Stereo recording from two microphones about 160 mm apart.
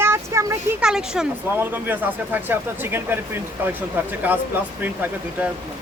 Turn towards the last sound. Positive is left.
turn(degrees=-10)  # may be behind; listen again after turning